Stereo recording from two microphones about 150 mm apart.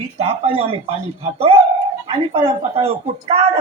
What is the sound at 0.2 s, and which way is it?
Speech, 40° right (ahead or behind).